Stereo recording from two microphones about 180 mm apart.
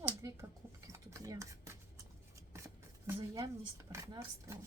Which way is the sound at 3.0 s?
15° right (ahead or behind).